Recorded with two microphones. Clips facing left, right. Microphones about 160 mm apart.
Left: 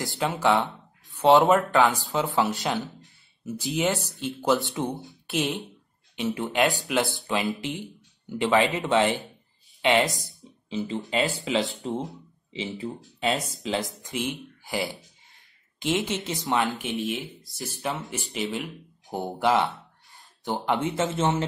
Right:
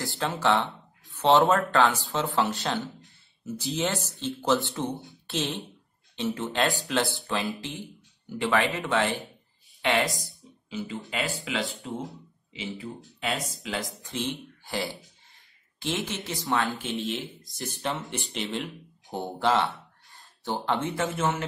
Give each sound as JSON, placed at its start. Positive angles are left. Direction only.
{"t": 0.0, "sound": "speech", "side_deg": 15}
{"t": 14.0, "sound": "speech", "side_deg": 10}
{"t": 17.6, "sound": "speech", "side_deg": 0}